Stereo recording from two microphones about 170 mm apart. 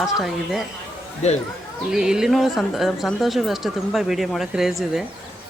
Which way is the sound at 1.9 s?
5° right (ahead or behind).